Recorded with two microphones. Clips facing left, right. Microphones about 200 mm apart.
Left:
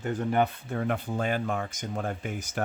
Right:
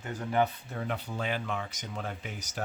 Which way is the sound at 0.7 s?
50° left (ahead or behind).